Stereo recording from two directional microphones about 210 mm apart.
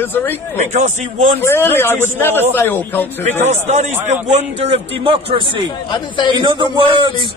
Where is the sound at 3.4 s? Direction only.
30° right (ahead or behind).